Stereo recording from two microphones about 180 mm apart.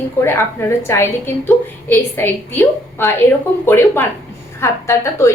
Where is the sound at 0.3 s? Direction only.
15° left (ahead or behind).